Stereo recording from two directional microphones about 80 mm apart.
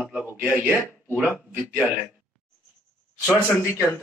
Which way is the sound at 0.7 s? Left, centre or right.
Left.